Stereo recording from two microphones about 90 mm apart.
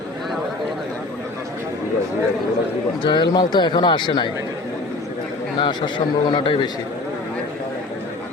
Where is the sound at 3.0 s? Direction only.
60° left (ahead or behind).